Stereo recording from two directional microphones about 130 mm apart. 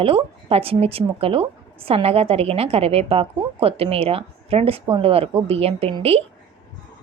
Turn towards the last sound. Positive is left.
turn(degrees=-50)  # may be behind; listen again after turning